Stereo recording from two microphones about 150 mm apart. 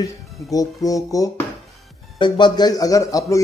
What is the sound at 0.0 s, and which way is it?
A man's voice, 25° left (ahead or behind).